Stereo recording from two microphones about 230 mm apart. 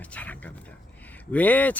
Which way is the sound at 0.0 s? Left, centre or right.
Centre.